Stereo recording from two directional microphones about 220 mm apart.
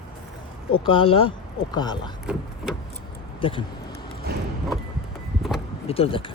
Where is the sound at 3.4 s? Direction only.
25° left (ahead or behind).